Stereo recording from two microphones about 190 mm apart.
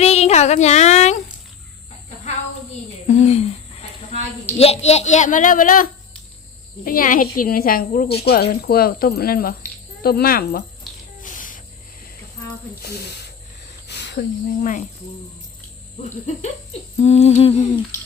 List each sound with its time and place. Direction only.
0.0 s speech: 35° left (ahead or behind)
3.1 s a woman's voice: 35° left (ahead or behind); by 10.6 s 50° left (ahead or behind)
11.2 s spray: 45° left (ahead or behind)
12.8 s speech: 60° left (ahead or behind)
13.8 s a sound: 65° left (ahead or behind)
14.6 s humming: 40° left (ahead or behind)
16.0 s humming: 40° left (ahead or behind)